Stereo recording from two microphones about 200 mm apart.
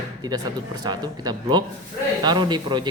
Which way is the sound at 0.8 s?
20° right (ahead or behind).